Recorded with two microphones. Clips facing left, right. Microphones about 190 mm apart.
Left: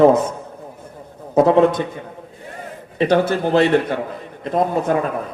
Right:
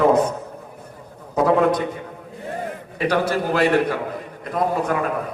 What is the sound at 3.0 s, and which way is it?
A man's voice, 25° left (ahead or behind).